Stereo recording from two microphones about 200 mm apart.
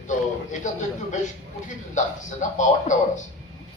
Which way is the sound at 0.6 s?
40° left (ahead or behind).